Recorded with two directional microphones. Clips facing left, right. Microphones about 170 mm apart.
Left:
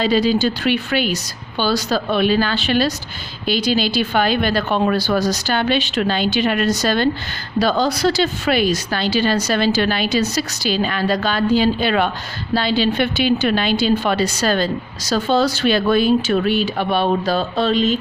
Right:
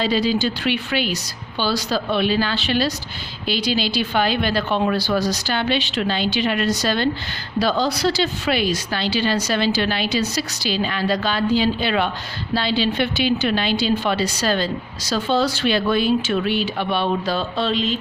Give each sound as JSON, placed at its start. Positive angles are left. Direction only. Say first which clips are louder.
{"t": 0.0, "sound": "a woman's voice", "louder": "left 3 dB", "side_deg": 45}